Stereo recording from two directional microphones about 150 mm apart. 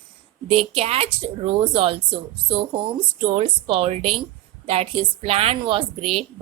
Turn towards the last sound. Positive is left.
turn(degrees=-40)  # may be behind; listen again after turning